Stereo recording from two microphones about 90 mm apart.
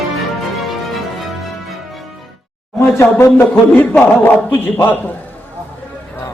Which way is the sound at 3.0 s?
30° left (ahead or behind).